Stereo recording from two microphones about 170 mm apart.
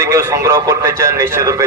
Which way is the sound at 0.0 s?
15° right (ahead or behind).